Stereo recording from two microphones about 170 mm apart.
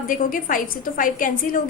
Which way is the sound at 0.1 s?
55° left (ahead or behind).